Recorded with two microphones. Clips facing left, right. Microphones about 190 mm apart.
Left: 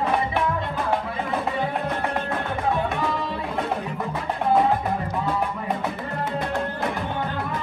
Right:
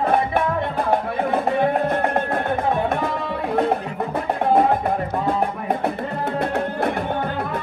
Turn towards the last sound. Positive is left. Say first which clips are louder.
# right 4 dB
turn(degrees=-55)  # may be behind; listen again after turning